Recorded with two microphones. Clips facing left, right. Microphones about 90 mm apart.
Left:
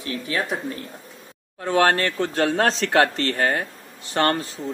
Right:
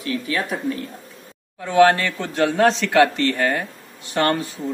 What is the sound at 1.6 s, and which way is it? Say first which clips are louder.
A man's voice: right 4 dB; 40° left (ahead or behind).